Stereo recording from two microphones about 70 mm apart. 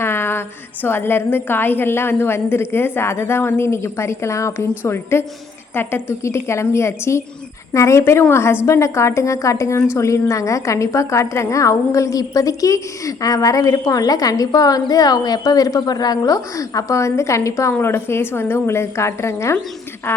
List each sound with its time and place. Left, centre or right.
0.0 s a woman's voice: left